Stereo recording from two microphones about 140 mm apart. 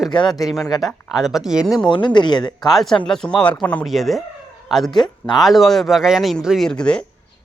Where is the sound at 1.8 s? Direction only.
35° left (ahead or behind).